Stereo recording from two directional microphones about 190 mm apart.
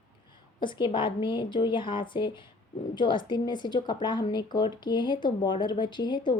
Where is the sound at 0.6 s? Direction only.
25° left (ahead or behind).